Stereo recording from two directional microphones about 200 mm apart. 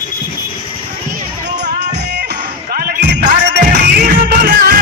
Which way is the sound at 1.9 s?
55° right (ahead or behind).